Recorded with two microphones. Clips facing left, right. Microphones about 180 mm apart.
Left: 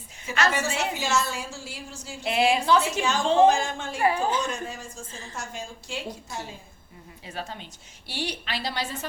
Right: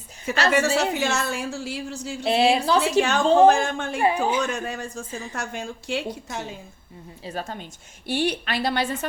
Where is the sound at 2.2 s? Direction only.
30° right (ahead or behind).